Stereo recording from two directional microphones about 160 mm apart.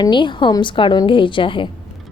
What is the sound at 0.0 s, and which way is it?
A woman's voice, 30° left (ahead or behind).